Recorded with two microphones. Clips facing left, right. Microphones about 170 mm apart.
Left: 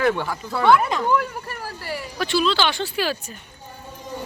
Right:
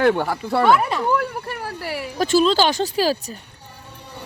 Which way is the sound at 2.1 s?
40° right (ahead or behind).